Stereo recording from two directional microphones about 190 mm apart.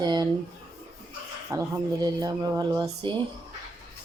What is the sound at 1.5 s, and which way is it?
Speech, 15° right (ahead or behind).